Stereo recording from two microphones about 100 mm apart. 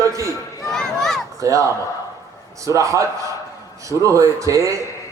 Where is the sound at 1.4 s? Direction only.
30° right (ahead or behind).